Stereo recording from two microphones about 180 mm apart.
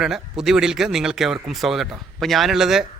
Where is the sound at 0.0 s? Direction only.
5° right (ahead or behind).